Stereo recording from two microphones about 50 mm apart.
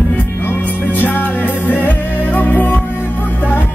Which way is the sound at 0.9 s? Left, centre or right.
Left.